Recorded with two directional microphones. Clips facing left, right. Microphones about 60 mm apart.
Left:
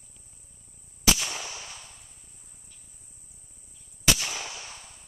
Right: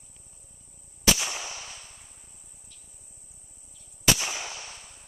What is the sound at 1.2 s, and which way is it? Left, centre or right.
Gunshot, centre.